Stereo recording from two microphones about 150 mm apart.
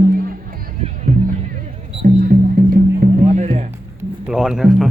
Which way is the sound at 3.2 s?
50° right (ahead or behind).